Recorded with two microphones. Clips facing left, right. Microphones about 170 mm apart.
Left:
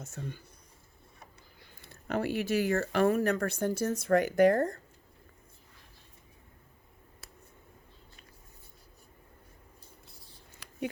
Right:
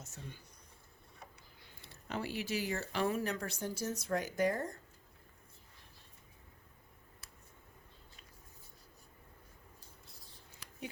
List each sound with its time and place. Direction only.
0.0 s speech: 55° left (ahead or behind)
1.8 s speech: 55° left (ahead or behind)
10.6 s a sound: 70° left (ahead or behind)